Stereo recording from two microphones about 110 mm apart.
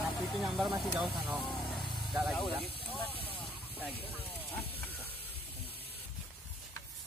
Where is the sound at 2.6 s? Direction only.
55° left (ahead or behind).